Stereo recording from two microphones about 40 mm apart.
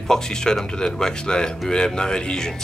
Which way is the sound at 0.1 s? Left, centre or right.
Centre.